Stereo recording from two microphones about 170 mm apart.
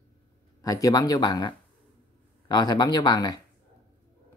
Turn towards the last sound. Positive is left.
turn(degrees=25)  # may be behind; listen again after turning